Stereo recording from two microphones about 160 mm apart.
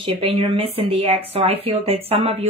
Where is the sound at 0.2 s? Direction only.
35° right (ahead or behind).